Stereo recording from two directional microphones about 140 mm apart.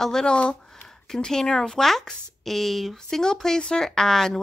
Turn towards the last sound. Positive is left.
turn(degrees=5)  # may be behind; listen again after turning